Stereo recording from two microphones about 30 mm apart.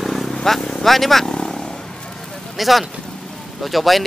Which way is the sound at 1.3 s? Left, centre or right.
Left.